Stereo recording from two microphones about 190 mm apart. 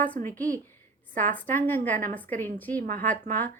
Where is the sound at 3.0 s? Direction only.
40° right (ahead or behind).